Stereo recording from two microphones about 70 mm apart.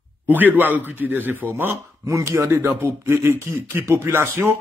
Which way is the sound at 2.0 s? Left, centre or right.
Right.